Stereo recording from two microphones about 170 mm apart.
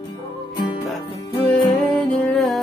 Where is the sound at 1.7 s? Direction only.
10° left (ahead or behind).